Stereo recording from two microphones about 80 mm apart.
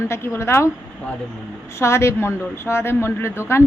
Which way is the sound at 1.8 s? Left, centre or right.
Left.